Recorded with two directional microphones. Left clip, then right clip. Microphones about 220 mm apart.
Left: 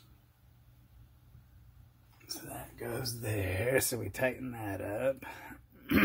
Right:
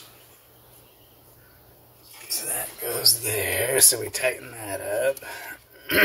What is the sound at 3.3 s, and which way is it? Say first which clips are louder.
Speech: right 8 dB; 40° left (ahead or behind).